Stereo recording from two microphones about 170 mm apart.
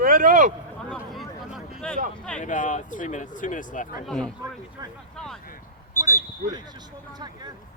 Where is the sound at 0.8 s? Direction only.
5° left (ahead or behind).